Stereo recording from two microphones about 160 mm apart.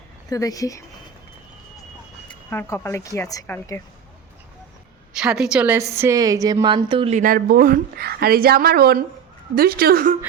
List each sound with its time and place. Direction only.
0.3 s speech: 20° left (ahead or behind)
2.5 s speech: 15° left (ahead or behind)
5.1 s a woman's voice: 5° right (ahead or behind); by 7.1 s 30° right (ahead or behind)
7.1 s a woman's voice: 55° right (ahead or behind)